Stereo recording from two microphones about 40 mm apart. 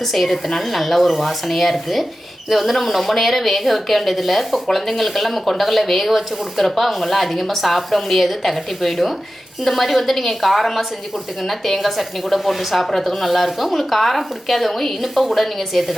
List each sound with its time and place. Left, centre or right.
0.0 s speech: centre